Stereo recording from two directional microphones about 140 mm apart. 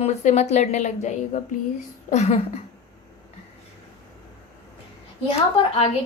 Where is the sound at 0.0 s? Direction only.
50° left (ahead or behind).